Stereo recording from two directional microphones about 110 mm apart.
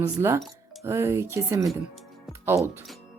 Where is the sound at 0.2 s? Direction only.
25° right (ahead or behind).